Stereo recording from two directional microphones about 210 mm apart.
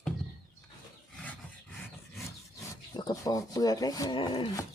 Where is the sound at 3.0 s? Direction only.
20° left (ahead or behind).